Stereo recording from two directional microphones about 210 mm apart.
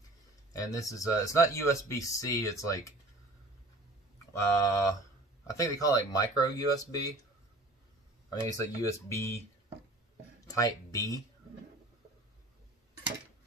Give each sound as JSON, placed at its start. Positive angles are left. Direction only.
{"t": 0.5, "sound": "speech", "side_deg": 15}
{"t": 4.3, "sound": "speech", "side_deg": 15}
{"t": 8.5, "sound": "speech", "side_deg": 15}
{"t": 10.4, "sound": "speech", "side_deg": 15}